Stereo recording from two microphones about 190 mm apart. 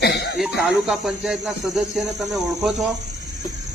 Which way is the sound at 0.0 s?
60° left (ahead or behind).